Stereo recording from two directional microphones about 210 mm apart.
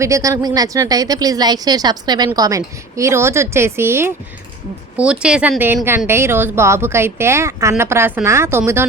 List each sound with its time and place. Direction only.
0.0 s speech: 15° right (ahead or behind)